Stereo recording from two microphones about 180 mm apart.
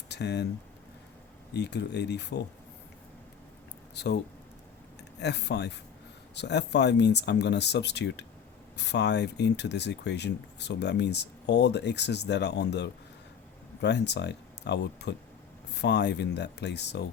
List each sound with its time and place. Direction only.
0.1 s speech: 70° left (ahead or behind)
1.5 s speech: 70° left (ahead or behind)
3.9 s speech: 70° left (ahead or behind)
5.2 s speech: 70° left (ahead or behind)